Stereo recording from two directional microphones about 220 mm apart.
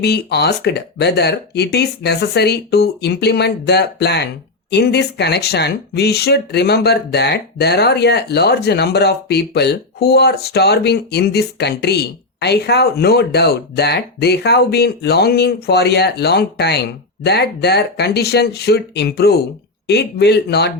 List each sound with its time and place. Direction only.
0.0 s speech: 50° left (ahead or behind)